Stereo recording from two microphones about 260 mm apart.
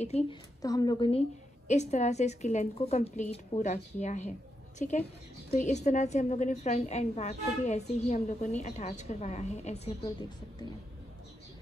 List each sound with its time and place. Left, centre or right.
0.0 s a woman's voice: left
0.6 s a woman's voice: centre